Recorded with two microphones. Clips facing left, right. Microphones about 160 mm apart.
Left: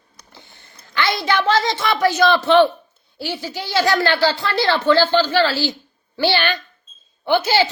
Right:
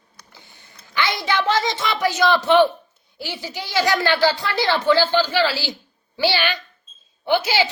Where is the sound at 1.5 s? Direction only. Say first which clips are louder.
Left 3 dB; 15° right (ahead or behind).